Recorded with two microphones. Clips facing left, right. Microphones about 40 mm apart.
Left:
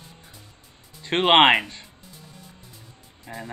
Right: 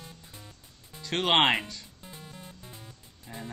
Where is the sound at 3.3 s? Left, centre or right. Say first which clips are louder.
Left 6 dB; left.